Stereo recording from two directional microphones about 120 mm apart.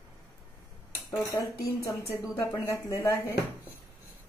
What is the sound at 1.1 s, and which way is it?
Speech, 20° left (ahead or behind).